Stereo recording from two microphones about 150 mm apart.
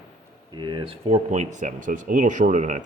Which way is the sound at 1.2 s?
55° right (ahead or behind).